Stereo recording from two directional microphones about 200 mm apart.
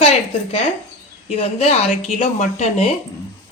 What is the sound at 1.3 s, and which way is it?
Speech, 30° left (ahead or behind).